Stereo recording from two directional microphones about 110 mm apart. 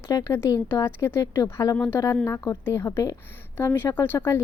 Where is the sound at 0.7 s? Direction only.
25° left (ahead or behind).